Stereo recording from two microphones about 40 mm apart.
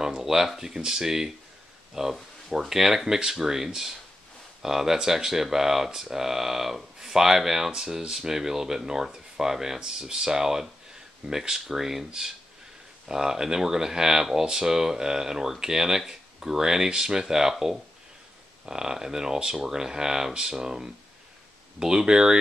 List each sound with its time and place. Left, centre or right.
0.2 s speech: centre